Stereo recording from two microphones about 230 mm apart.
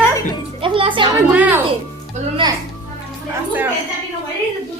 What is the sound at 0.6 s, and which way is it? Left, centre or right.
Speech, right.